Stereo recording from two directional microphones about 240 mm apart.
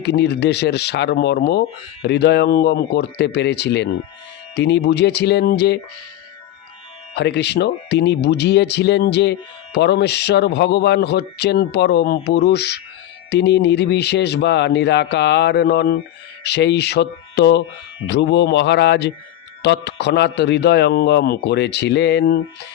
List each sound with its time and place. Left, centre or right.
0.0 s speech: left
7.2 s speech: left